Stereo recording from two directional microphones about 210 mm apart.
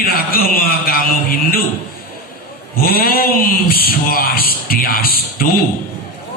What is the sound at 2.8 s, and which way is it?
Mantra, 45° left (ahead or behind).